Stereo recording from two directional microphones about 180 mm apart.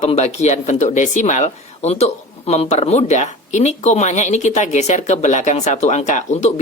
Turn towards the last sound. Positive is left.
turn(degrees=40)  # may be behind; listen again after turning